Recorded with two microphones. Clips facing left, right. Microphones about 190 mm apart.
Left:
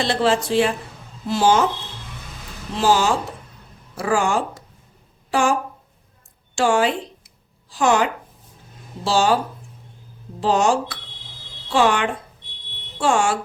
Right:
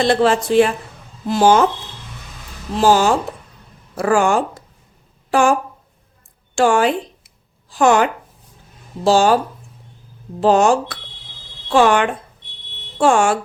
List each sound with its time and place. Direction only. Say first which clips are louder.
0.0 s speech: right 4 dB; 50° right (ahead or behind)
2.8 s speech: right 4 dB; 45° right (ahead or behind)
6.6 s speech: right 4 dB; 50° right (ahead or behind)
10.4 s speech: right 5 dB; 50° right (ahead or behind)